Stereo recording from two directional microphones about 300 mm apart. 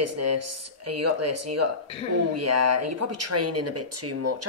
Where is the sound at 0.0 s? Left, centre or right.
Right.